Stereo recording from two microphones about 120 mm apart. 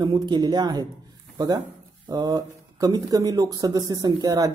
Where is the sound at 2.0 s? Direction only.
30° right (ahead or behind).